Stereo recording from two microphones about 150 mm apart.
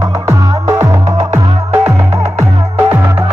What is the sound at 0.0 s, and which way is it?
Music, 15° right (ahead or behind).